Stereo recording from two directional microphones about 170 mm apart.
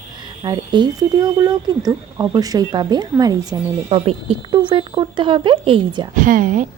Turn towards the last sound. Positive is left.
turn(degrees=-50)  # may be behind; listen again after turning